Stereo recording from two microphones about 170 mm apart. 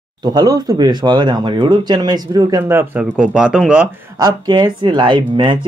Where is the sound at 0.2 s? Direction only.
25° right (ahead or behind); by 3.9 s 5° right (ahead or behind).